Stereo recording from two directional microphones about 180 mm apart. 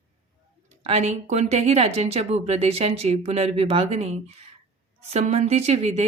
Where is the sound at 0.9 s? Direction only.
35° right (ahead or behind).